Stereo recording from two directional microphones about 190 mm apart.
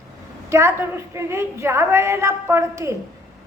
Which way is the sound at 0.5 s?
15° right (ahead or behind).